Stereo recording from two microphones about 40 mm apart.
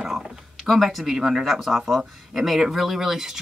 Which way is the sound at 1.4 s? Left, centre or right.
Centre.